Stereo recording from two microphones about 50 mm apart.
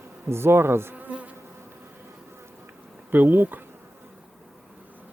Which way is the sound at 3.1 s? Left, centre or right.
Right.